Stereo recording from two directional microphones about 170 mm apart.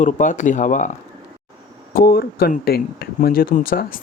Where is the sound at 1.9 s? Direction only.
60° left (ahead or behind).